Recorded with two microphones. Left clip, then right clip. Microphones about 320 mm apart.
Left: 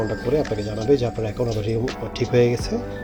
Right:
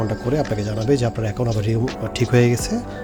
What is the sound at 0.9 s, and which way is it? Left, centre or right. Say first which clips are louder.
Speech: left 1 dB; right.